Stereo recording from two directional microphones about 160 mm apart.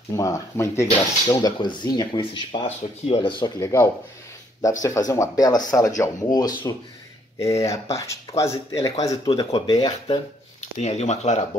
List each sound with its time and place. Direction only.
0.1 s speech: 20° left (ahead or behind)
10.6 s speech: 45° left (ahead or behind)